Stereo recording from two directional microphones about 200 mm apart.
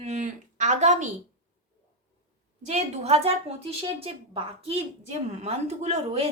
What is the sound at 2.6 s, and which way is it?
Speech, 35° right (ahead or behind).